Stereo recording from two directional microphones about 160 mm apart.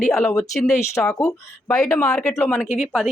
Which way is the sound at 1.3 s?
20° left (ahead or behind).